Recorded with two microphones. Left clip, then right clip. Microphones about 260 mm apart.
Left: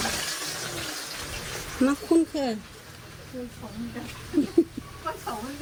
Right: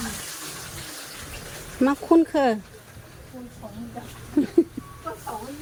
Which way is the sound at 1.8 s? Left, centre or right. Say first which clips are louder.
Right 4 dB; centre.